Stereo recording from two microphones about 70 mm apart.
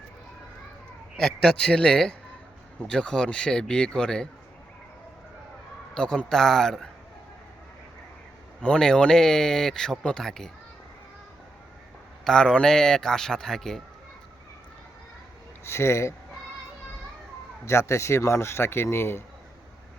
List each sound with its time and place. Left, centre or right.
1.1 s speech: centre
5.9 s speech: centre
8.6 s speech: centre
12.2 s speech: centre
15.6 s a man's voice: left
17.7 s a man's voice: left